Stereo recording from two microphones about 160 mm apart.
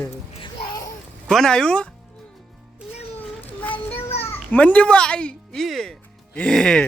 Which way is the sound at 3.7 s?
40° left (ahead or behind).